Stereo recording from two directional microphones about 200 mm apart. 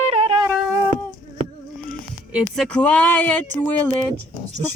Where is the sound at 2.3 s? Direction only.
5° right (ahead or behind).